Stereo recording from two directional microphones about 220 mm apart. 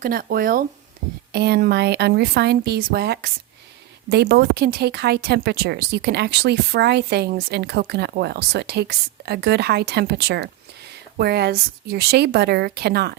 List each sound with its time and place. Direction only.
0.0 s speech: 40° right (ahead or behind)